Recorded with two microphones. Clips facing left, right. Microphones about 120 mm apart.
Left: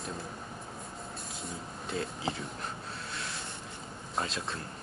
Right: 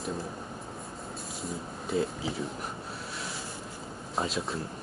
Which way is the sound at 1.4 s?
Centre (ahead or behind).